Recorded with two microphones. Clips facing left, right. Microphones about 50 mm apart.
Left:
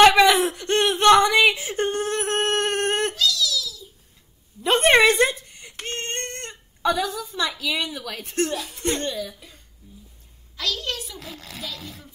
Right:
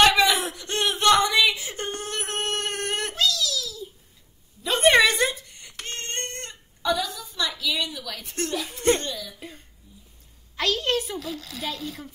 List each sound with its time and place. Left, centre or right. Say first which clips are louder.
0.4 s whimper: left 6 dB; left
2.0 s a sound: left 7 dB; left
3.2 s a sound: left 1 dB; right
4.6 s a sound: left 2 dB; left
5.7 s female singing: left 4 dB; centre
5.9 s female singing: left 2 dB; left
6.8 s a sound: left 3 dB; left
7.3 s a woman's voice: left 1 dB; left
8.5 s speech: right 2 dB; right
9.0 s a woman's voice: left 5 dB; left
10.5 s a woman's voice: right 4 dB; right
11.1 s a child's voice: right 5 dB; left